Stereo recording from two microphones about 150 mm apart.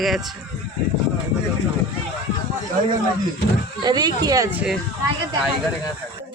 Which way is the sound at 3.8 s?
25° right (ahead or behind).